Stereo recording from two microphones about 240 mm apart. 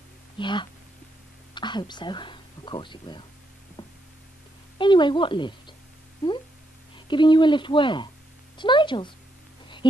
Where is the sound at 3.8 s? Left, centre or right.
Centre.